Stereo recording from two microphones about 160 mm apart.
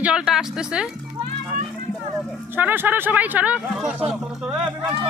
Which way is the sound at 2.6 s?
10° right (ahead or behind).